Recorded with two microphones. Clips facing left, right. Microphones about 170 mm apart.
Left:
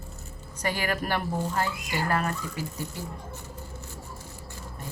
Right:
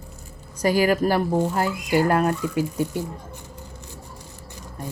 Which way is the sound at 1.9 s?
45° right (ahead or behind).